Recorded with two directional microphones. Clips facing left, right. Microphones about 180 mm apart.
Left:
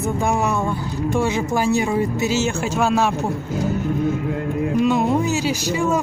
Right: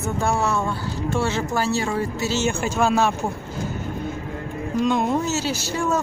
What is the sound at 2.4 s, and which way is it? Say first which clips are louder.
Speech: left 1 dB; centre (ahead or behind).